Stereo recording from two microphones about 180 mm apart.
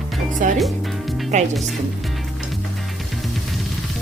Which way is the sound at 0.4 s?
45° right (ahead or behind).